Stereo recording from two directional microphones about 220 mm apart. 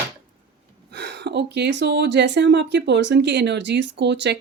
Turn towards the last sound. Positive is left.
turn(degrees=-50)  # may be behind; listen again after turning